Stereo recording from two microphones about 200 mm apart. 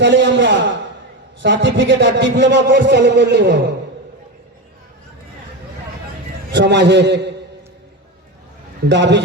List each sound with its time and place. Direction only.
0.0 s a man's voice: 65° right (ahead or behind)
6.5 s a man's voice: 60° right (ahead or behind)
8.9 s a man's voice: 60° right (ahead or behind)